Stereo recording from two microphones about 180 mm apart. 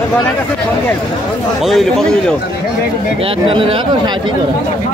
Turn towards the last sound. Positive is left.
turn(degrees=-30)  # may be behind; listen again after turning